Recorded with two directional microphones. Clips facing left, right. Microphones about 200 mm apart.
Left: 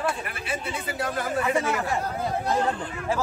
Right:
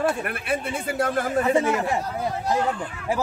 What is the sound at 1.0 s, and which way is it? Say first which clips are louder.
Speech: right 4 dB; 45° right (ahead or behind).